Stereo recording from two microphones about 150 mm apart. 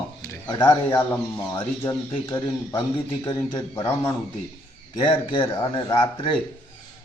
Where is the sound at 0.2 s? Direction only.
25° left (ahead or behind).